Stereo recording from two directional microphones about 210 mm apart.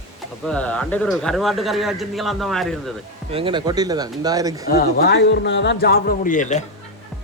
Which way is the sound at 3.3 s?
25° right (ahead or behind).